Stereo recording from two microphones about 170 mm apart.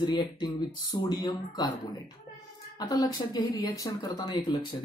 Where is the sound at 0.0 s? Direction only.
25° left (ahead or behind).